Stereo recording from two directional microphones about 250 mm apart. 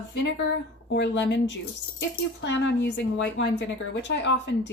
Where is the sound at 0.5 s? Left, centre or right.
Left.